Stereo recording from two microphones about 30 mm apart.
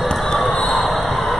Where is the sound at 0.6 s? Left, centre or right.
Centre.